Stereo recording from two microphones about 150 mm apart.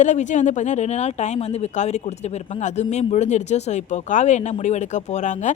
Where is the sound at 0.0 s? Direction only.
50° left (ahead or behind).